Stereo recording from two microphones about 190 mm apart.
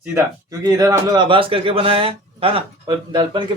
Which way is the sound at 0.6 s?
20° right (ahead or behind).